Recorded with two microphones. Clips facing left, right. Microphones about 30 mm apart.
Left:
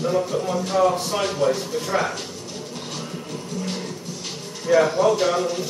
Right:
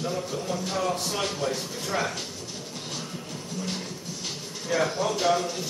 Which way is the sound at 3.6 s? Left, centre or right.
Centre.